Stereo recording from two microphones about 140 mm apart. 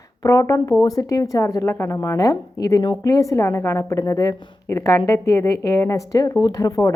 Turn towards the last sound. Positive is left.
turn(degrees=25)  # may be behind; listen again after turning